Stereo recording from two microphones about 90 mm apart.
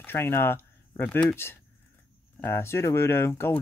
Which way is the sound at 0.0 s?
25° left (ahead or behind).